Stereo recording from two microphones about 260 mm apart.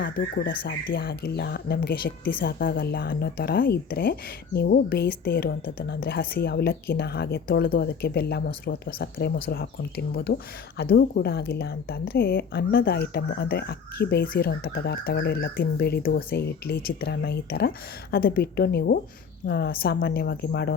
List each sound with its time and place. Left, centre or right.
0.0 s a woman's voice: left